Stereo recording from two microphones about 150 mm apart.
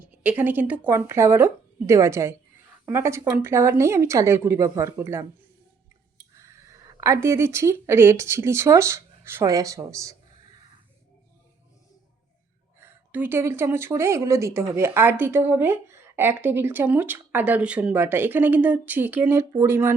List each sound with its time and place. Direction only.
0.0 s a woman's voice: 10° right (ahead or behind)
6.3 s speech: 20° right (ahead or behind)
12.8 s a woman's voice: 15° right (ahead or behind)